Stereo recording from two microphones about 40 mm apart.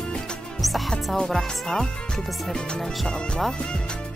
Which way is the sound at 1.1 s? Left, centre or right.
Centre.